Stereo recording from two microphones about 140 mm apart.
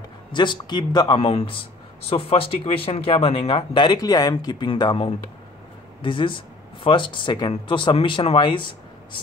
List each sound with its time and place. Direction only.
0.3 s speech: 35° left (ahead or behind)